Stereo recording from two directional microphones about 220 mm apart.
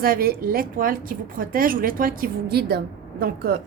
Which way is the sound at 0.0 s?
40° right (ahead or behind).